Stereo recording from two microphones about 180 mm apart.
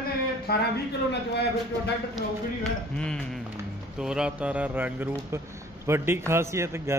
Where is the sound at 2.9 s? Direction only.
5° left (ahead or behind).